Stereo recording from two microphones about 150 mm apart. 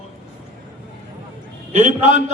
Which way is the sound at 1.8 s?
55° right (ahead or behind).